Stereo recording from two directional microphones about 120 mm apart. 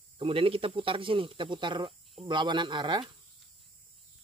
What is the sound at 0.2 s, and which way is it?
Speech, 50° right (ahead or behind).